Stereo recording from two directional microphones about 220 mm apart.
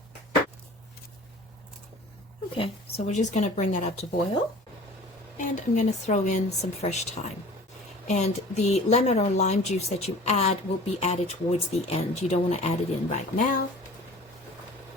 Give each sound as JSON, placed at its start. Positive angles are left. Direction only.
{"t": 2.6, "sound": "speech", "side_deg": 30}
{"t": 5.4, "sound": "speech", "side_deg": 35}